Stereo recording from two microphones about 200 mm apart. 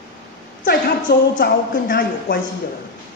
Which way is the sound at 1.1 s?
55° left (ahead or behind).